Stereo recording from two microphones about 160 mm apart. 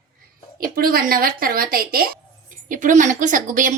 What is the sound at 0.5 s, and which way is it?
A woman's voice, 65° right (ahead or behind).